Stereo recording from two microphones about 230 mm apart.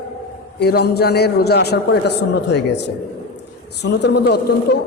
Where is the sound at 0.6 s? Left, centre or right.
Left.